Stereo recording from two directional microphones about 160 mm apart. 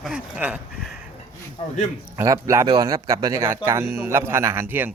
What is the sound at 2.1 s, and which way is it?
Speech, 20° right (ahead or behind).